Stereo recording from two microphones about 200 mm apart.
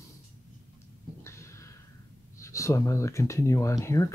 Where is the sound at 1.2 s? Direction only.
15° left (ahead or behind).